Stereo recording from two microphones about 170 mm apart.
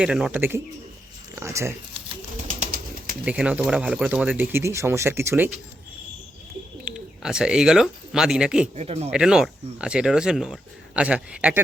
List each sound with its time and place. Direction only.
0.0 s speech: 5° right (ahead or behind)
2.5 s bird: 55° right (ahead or behind)
3.2 s speech: 5° right (ahead or behind)
6.8 s speech: 5° right (ahead or behind)
8.7 s speech: 40° right (ahead or behind)
9.0 s speech: 5° right (ahead or behind)